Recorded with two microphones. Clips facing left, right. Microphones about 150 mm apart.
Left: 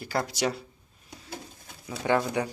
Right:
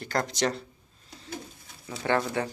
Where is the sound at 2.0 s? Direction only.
15° left (ahead or behind).